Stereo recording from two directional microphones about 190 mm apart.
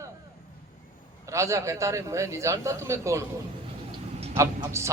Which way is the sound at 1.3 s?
15° right (ahead or behind).